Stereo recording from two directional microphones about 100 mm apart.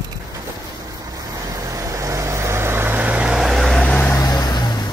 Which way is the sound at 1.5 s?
35° right (ahead or behind).